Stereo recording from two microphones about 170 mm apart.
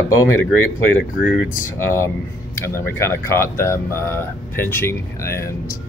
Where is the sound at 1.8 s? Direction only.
15° left (ahead or behind).